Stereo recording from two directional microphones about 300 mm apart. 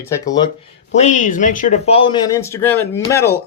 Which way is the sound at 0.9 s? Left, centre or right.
Left.